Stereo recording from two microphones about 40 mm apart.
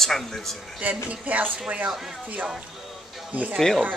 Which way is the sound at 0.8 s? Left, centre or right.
Right.